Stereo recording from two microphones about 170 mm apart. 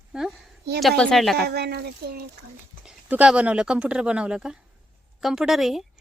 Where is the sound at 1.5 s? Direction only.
70° right (ahead or behind).